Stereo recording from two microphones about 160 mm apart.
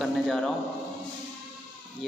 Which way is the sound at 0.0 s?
Centre (ahead or behind).